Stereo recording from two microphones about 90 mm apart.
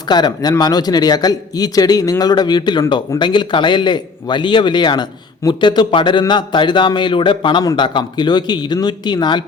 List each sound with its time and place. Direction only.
0.1 s a man's voice: 50° left (ahead or behind)